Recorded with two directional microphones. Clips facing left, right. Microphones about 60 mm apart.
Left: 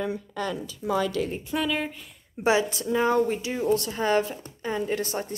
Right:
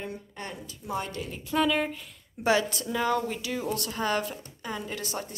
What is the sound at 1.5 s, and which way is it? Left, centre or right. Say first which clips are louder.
Speech: right 4 dB; centre.